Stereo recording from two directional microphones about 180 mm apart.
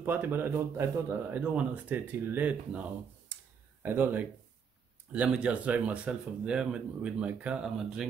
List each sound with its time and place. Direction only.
0.0 s speech: 10° right (ahead or behind)